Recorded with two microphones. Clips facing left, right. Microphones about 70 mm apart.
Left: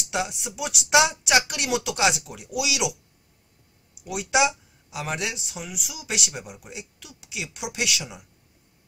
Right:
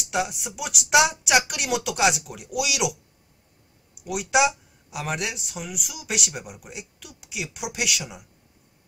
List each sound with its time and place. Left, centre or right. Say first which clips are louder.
0.0 s speech: right 2 dB; centre
4.0 s speech: right 1 dB; centre